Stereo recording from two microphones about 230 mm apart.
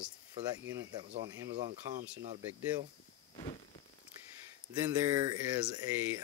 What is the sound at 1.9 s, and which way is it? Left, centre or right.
Speech, right.